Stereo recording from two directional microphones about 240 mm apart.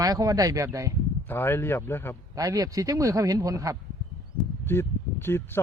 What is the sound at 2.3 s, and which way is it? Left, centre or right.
A man's voice, centre.